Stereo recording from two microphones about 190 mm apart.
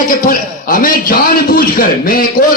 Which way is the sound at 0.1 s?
45° left (ahead or behind).